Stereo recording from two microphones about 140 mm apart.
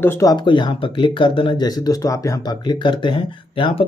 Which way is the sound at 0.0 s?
20° left (ahead or behind).